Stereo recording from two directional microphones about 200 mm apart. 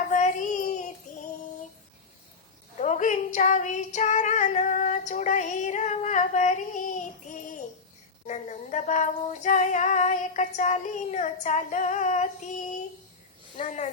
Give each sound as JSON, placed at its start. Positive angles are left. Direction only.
{"t": 0.1, "sound": "a sound", "side_deg": 35}
{"t": 2.8, "sound": "female singing", "side_deg": 35}
{"t": 8.3, "sound": "female singing", "side_deg": 35}